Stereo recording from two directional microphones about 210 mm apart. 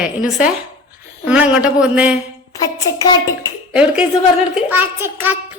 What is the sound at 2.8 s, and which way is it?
Speech, 15° left (ahead or behind).